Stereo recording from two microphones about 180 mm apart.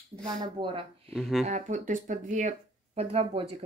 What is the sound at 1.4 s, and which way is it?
Speech, 40° right (ahead or behind).